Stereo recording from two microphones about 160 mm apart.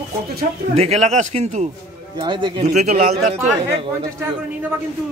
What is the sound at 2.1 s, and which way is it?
Speech, 30° right (ahead or behind).